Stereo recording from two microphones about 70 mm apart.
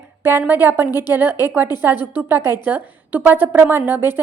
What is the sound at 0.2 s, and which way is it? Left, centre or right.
A woman's voice, right.